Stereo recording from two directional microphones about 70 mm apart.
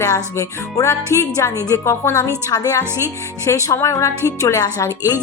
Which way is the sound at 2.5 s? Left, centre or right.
Left.